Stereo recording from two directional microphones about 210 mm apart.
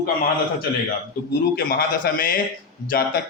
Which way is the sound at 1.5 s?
45° left (ahead or behind).